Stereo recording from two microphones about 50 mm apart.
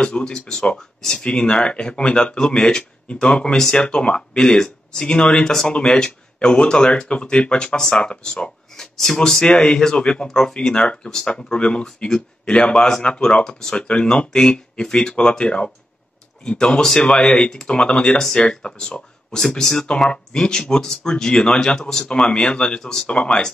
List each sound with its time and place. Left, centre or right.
0.0 s speech: centre
9.4 s speech: centre